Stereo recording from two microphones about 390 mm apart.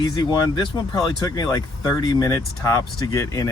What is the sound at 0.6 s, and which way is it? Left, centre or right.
Speech, centre.